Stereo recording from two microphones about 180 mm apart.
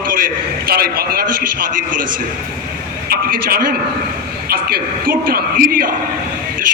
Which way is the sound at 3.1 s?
55° right (ahead or behind).